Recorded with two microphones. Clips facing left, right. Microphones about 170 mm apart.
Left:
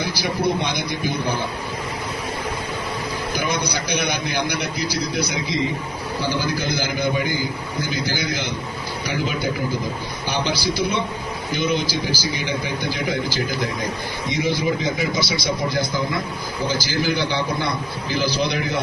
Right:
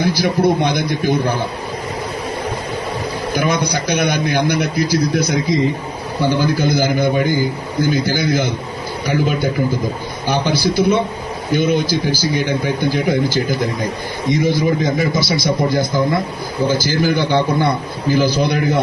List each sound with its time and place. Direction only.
0.0 s a man's voice: 50° right (ahead or behind)
3.3 s a man's voice: 50° right (ahead or behind)